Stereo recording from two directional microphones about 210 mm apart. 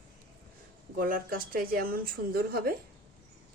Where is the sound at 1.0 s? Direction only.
40° right (ahead or behind).